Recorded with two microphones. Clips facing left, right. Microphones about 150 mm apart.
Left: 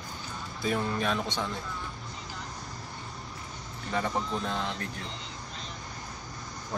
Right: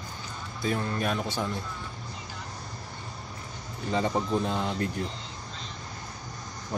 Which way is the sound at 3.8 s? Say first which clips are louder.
Right 4 dB; 20° right (ahead or behind).